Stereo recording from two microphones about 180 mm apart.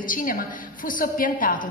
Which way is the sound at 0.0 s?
50° left (ahead or behind).